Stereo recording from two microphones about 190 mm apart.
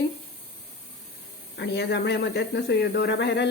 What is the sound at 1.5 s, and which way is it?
Speech, 65° left (ahead or behind).